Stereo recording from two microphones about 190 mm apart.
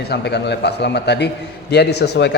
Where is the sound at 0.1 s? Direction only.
60° left (ahead or behind).